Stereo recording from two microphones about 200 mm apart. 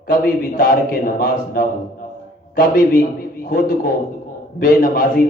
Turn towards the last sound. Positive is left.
turn(degrees=45)  # may be behind; listen again after turning